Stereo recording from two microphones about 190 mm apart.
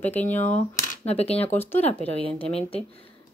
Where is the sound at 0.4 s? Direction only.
35° left (ahead or behind).